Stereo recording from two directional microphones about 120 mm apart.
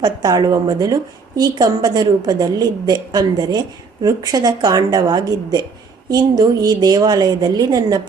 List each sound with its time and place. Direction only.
0.0 s a woman's voice: 35° right (ahead or behind)